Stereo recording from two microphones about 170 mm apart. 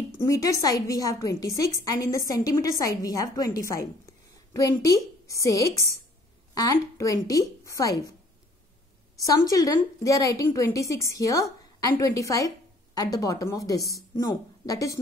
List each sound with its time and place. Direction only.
0.2 s a woman's voice: 20° left (ahead or behind)
9.5 s a woman's voice: 20° left (ahead or behind)